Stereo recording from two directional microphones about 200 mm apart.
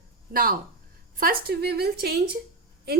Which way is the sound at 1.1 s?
45° right (ahead or behind).